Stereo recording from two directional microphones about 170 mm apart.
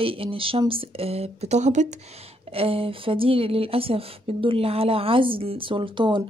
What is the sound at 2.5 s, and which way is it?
Speech, 35° right (ahead or behind).